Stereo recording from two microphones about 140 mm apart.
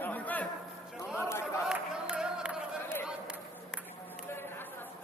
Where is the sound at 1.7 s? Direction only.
5° right (ahead or behind).